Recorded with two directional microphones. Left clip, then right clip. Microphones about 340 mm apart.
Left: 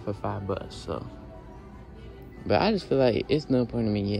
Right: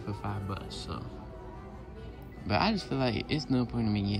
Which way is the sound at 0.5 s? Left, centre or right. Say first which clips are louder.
Left 7 dB; right.